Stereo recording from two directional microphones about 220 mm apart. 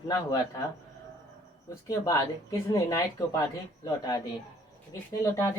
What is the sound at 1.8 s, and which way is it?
Speech, 15° left (ahead or behind).